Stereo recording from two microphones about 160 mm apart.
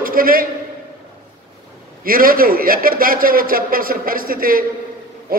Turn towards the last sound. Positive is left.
turn(degrees=-65)  # may be behind; listen again after turning